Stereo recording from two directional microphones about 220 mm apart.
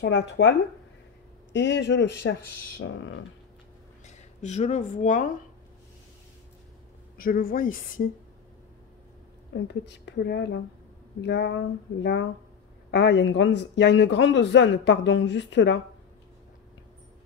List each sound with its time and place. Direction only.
0.0 s a man's voice: 55° left (ahead or behind)
4.0 s speech: 30° left (ahead or behind)
7.2 s speech: 40° left (ahead or behind)
9.5 s a man's voice: 55° left (ahead or behind)